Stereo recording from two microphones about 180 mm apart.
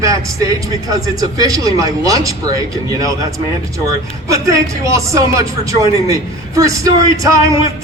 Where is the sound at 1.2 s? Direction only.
20° right (ahead or behind).